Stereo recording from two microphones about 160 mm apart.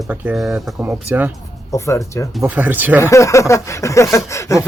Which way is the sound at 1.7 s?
20° left (ahead or behind).